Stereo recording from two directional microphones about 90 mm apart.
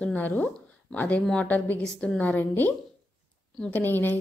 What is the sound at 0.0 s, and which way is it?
A woman's voice, 20° left (ahead or behind).